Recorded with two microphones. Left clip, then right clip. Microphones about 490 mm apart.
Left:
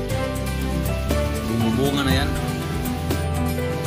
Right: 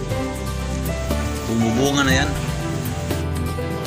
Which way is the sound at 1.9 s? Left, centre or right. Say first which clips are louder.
Right 6 dB; left.